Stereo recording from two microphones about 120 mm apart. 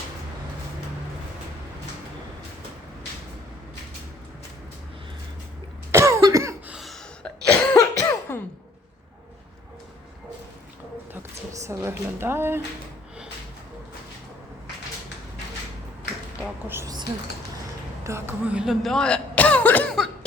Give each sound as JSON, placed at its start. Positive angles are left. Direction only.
{"t": 5.9, "sound": "cough", "side_deg": -25}
{"t": 6.7, "sound": "cough", "side_deg": 0}
{"t": 7.8, "sound": "cough", "side_deg": 25}
{"t": 11.5, "sound": "a sound", "side_deg": -25}
{"t": 16.4, "sound": "a sound", "side_deg": -20}
{"t": 18.0, "sound": "speech", "side_deg": -25}
{"t": 18.4, "sound": "throat clearing", "side_deg": -5}